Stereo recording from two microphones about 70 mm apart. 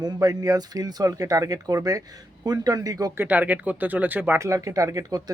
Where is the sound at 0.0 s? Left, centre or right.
Right.